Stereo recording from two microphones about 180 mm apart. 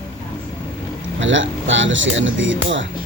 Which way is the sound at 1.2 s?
90° right.